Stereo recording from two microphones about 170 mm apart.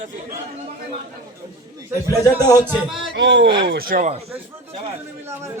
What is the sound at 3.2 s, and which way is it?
Speech, 90° right.